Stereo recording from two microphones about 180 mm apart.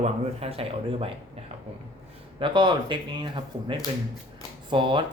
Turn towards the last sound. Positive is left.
turn(degrees=-25)  # may be behind; listen again after turning